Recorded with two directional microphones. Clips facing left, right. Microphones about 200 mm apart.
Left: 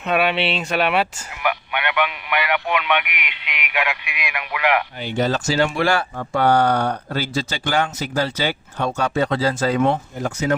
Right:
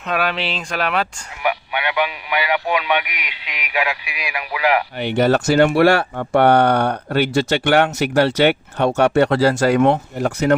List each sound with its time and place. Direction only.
0.0 s speech: 5° left (ahead or behind)
2.6 s speech: 35° right (ahead or behind)
4.9 s speech: 65° right (ahead or behind)